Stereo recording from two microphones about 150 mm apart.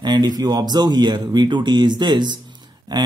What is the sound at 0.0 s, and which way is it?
Speech, 30° right (ahead or behind).